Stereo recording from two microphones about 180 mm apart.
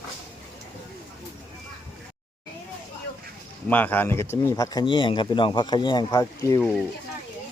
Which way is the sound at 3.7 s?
10° left (ahead or behind).